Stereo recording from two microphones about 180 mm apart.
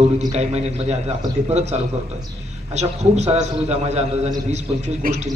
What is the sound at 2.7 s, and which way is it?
A man's voice, 40° right (ahead or behind).